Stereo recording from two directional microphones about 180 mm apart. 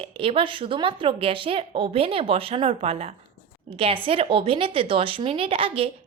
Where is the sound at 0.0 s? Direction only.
30° right (ahead or behind).